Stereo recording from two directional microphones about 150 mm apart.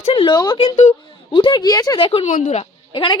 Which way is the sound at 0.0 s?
35° left (ahead or behind).